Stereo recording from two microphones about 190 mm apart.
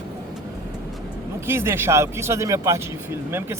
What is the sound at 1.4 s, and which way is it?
Speech, 10° right (ahead or behind).